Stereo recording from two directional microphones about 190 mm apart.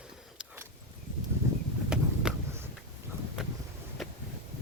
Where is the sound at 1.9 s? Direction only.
5° right (ahead or behind).